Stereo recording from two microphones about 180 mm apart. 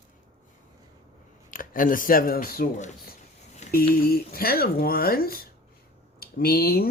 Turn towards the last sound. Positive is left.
turn(degrees=55)  # may be behind; listen again after turning